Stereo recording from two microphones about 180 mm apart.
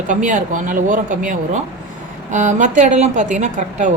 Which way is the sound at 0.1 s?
45° right (ahead or behind).